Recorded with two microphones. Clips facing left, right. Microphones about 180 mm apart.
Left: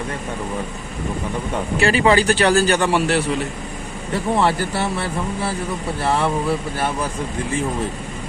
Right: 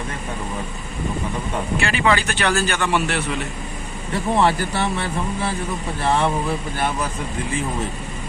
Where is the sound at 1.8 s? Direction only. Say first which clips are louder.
Left 6 dB; 40° left (ahead or behind).